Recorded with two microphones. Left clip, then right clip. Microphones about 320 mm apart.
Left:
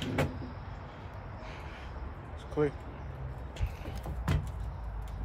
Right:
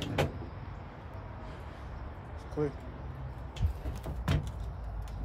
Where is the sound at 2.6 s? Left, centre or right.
Centre.